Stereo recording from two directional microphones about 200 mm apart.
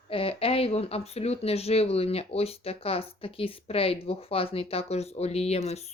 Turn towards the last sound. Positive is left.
turn(degrees=35)  # may be behind; listen again after turning